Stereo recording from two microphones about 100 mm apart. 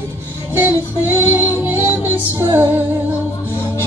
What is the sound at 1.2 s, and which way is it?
Music, 20° right (ahead or behind).